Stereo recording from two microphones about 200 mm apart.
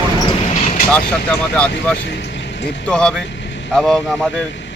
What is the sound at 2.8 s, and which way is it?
Speech, 5° left (ahead or behind).